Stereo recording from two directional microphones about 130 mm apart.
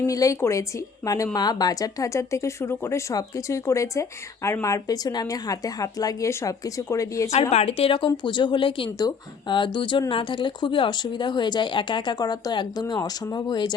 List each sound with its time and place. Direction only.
0.1 s speech: 25° left (ahead or behind)
7.5 s speech: 50° left (ahead or behind); by 13.7 s 35° left (ahead or behind)